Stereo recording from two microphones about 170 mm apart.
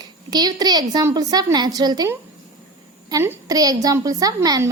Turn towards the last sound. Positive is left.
turn(degrees=-20)  # may be behind; listen again after turning